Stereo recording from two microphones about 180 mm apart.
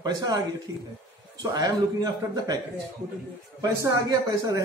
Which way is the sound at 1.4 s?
20° right (ahead or behind).